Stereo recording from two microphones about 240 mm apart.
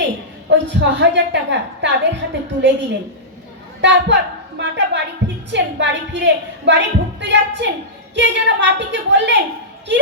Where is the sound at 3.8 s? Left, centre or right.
Right.